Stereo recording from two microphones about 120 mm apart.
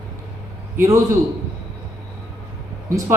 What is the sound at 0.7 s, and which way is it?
Speech, 25° right (ahead or behind).